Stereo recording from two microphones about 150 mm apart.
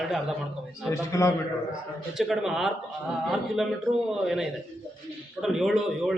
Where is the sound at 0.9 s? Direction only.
20° left (ahead or behind).